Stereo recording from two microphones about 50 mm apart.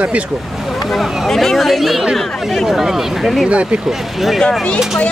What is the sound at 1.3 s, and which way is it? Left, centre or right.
Speech, centre.